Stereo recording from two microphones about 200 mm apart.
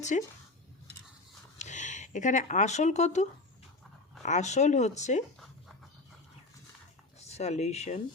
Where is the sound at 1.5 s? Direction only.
35° left (ahead or behind).